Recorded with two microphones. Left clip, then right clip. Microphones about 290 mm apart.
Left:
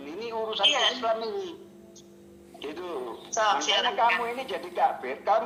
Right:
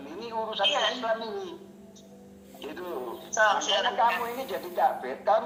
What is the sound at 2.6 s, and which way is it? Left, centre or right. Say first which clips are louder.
Speech: left 1 dB; left.